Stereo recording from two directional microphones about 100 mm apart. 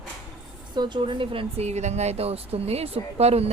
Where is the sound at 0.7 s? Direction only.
50° right (ahead or behind).